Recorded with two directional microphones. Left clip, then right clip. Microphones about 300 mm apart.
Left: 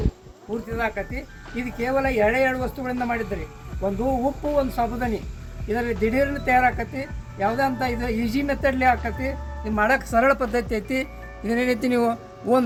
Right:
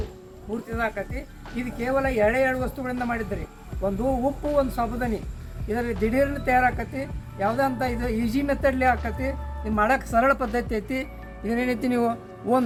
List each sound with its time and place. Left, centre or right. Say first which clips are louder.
0.8 s speech: left 1 dB; centre
9.7 s speech: left 1 dB; centre